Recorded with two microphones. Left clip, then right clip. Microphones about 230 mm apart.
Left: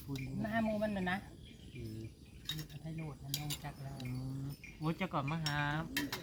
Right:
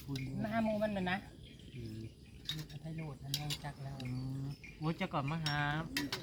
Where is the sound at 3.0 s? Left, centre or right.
Centre.